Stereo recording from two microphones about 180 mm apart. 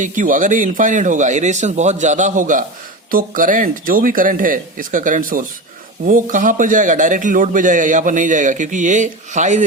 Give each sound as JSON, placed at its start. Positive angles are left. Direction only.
{"t": 0.0, "sound": "speech", "side_deg": -45}